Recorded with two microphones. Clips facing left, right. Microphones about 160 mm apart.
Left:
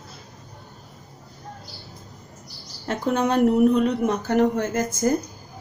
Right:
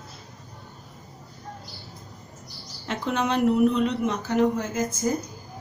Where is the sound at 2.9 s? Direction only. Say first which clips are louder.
Left 4 dB; 45° left (ahead or behind); by 5.1 s 70° left (ahead or behind).